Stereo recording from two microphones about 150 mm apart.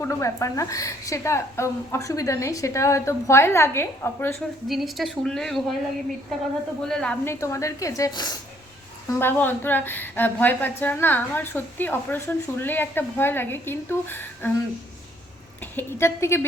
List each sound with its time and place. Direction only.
0.0 s a woman's voice: 20° left (ahead or behind)
4.4 s speech: centre (ahead or behind)
6.8 s speech: 5° left (ahead or behind)
7.3 s a woman's voice: 20° left (ahead or behind)
9.1 s a woman's voice: 15° left (ahead or behind)
15.6 s a woman's voice: 15° left (ahead or behind)